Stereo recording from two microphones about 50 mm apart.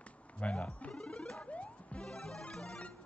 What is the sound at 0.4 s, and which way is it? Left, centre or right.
Speech, left.